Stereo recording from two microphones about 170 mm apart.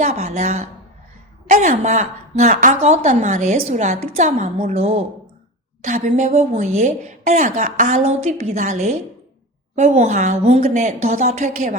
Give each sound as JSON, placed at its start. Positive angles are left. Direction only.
{"t": 0.2, "sound": "a woman's voice", "side_deg": -45}